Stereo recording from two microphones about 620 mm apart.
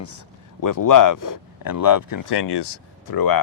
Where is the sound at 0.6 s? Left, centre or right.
Left.